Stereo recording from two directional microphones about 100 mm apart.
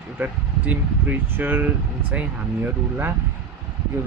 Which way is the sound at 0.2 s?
15° right (ahead or behind).